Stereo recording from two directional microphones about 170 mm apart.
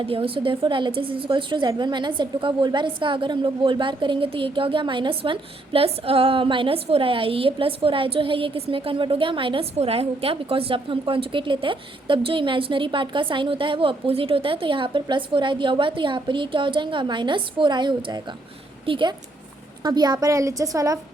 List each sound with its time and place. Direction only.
0.0 s a woman's voice: 35° right (ahead or behind)